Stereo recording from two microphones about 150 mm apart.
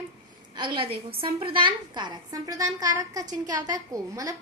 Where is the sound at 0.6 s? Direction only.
35° right (ahead or behind).